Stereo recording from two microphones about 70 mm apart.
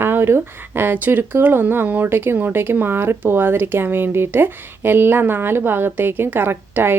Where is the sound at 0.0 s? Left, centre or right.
Right.